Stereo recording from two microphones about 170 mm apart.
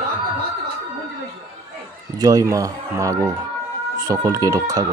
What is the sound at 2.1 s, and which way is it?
Speech, 20° right (ahead or behind).